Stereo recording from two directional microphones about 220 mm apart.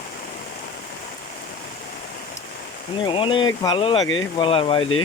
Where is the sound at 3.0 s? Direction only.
25° left (ahead or behind).